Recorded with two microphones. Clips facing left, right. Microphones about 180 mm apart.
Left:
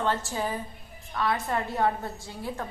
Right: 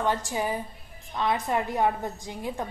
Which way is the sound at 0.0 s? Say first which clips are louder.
Right 1 dB; 15° right (ahead or behind).